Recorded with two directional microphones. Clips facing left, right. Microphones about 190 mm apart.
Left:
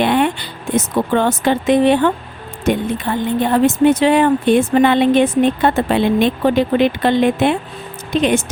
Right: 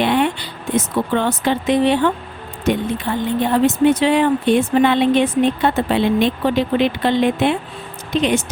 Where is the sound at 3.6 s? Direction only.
50° left (ahead or behind).